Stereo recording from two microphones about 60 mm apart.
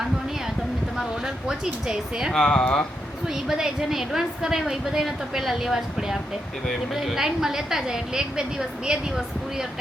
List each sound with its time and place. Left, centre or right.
0.9 s speech: centre
2.3 s speech: centre
3.2 s a woman's voice: centre